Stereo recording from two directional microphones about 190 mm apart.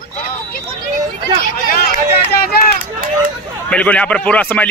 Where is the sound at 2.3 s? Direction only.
55° left (ahead or behind).